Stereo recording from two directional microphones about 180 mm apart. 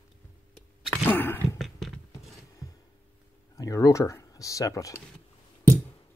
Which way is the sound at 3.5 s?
20° left (ahead or behind).